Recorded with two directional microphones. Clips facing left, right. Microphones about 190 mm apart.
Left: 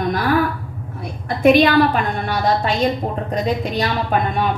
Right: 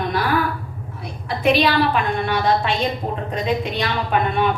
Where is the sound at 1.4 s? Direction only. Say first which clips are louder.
Left 5 dB; 50° left (ahead or behind).